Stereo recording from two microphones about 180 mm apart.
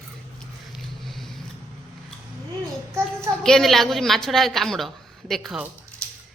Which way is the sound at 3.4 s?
Centre (ahead or behind).